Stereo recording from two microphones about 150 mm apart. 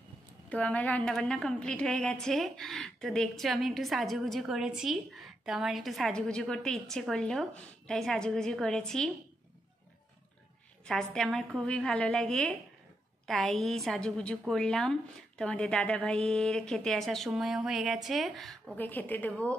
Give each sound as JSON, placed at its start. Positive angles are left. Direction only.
{"t": 0.5, "sound": "a woman's voice", "side_deg": 10}
{"t": 10.9, "sound": "a woman's voice", "side_deg": 5}
{"t": 18.8, "sound": "a woman's voice", "side_deg": 10}